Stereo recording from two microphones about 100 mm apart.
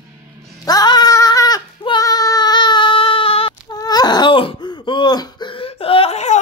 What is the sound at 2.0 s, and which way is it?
Child singing, 35° left (ahead or behind).